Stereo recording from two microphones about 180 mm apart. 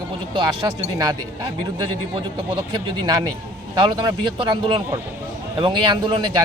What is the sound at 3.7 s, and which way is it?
Speech, 25° right (ahead or behind).